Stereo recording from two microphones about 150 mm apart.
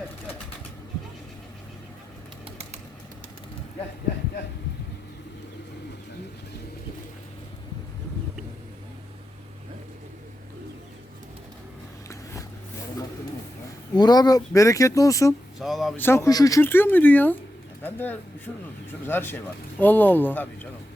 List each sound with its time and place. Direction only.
12.0 s a sound: 20° left (ahead or behind)
13.9 s speech: 25° left (ahead or behind)
15.5 s speech: centre (ahead or behind)
16.0 s speech: 15° left (ahead or behind)